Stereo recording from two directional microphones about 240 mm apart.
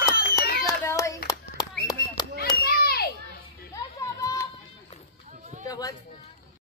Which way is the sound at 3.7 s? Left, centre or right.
Centre.